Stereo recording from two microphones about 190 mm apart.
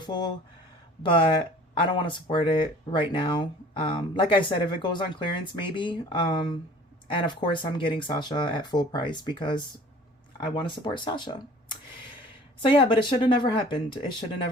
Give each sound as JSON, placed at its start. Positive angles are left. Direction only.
{"t": 1.0, "sound": "speech", "side_deg": 25}